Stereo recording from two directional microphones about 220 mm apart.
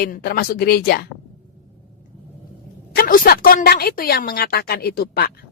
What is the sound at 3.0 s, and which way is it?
A woman's voice, 40° left (ahead or behind).